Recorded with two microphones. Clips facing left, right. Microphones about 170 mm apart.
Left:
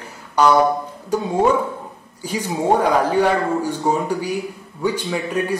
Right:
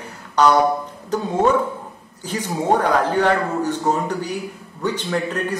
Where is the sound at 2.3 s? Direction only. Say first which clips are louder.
Left 1 dB; 10° left (ahead or behind).